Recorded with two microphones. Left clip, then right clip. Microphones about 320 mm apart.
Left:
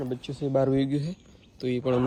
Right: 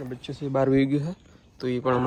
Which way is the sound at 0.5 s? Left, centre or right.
Right.